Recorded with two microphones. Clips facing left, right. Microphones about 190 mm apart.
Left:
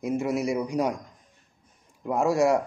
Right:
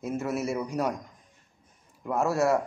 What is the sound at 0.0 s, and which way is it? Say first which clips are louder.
Speech: left 4 dB; 15° left (ahead or behind).